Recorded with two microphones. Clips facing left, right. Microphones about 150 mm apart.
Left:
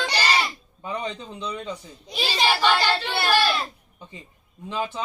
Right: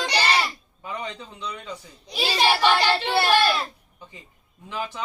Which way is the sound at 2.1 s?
5° right (ahead or behind).